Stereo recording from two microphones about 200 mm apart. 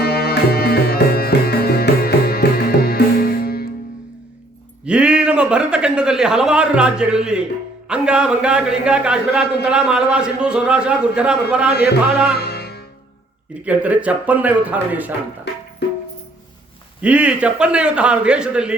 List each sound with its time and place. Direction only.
0.0 s music: 50° left (ahead or behind)
4.9 s a man's voice: 5° right (ahead or behind)
12.4 s music: 55° left (ahead or behind)
13.7 s a man's voice: 5° right (ahead or behind)
17.0 s a man's voice: 5° right (ahead or behind)